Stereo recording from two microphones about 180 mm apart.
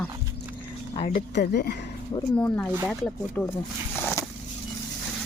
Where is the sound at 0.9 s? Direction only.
35° left (ahead or behind).